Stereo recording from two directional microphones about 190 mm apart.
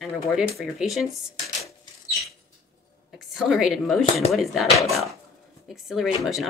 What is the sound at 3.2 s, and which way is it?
A woman's voice, centre (ahead or behind).